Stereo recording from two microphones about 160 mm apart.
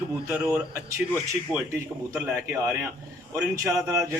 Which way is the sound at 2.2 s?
10° right (ahead or behind).